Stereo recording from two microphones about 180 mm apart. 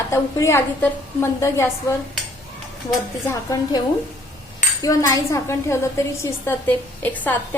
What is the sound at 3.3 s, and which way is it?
Speech, 20° left (ahead or behind).